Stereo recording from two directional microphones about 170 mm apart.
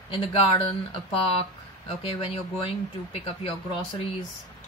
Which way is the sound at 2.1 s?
35° left (ahead or behind).